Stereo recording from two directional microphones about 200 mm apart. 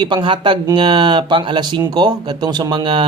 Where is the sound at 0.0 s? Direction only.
25° right (ahead or behind).